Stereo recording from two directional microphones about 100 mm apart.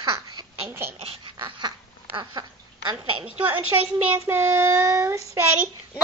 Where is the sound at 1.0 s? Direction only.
65° right (ahead or behind); by 2.4 s 45° right (ahead or behind).